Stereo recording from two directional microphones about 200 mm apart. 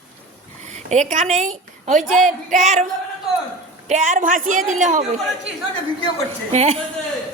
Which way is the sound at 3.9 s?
40° right (ahead or behind).